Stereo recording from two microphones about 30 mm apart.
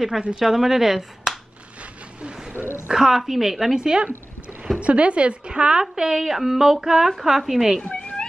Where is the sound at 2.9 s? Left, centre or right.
Centre.